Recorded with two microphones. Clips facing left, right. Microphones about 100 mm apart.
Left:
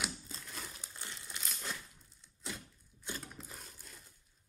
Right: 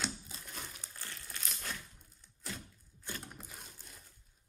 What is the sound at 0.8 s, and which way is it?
Crumpling, 20° left (ahead or behind).